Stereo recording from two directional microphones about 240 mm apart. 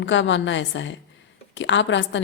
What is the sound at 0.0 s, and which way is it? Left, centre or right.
A woman's voice, left.